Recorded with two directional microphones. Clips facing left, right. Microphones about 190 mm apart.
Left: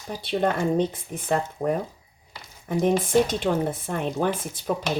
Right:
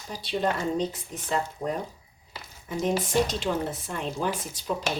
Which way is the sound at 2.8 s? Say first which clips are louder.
Left 4 dB; 55° left (ahead or behind).